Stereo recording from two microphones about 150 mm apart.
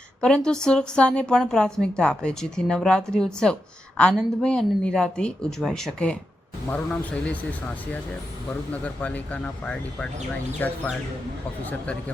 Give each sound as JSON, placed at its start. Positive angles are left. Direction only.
{"t": 0.2, "sound": "a woman's voice", "side_deg": 5}
{"t": 8.7, "sound": "speech", "side_deg": 10}
{"t": 11.6, "sound": "speech", "side_deg": 10}